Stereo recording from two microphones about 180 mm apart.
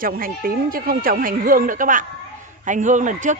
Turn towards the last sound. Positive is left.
turn(degrees=-45)  # may be behind; listen again after turning